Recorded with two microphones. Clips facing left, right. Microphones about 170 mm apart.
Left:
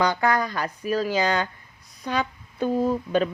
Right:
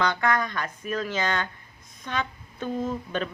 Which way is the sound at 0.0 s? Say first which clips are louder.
Left 3 dB; 35° left (ahead or behind).